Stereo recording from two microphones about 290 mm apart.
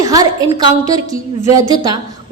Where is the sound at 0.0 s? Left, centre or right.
Centre.